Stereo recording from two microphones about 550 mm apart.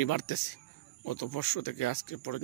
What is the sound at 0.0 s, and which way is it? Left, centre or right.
Speech, left.